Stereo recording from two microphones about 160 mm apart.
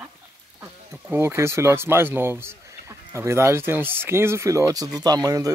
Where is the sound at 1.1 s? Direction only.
15° right (ahead or behind).